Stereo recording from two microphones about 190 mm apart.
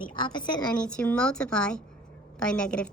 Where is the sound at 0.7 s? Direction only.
5° left (ahead or behind).